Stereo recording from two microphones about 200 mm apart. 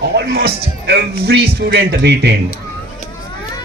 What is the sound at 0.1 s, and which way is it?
A man's voice, 55° right (ahead or behind).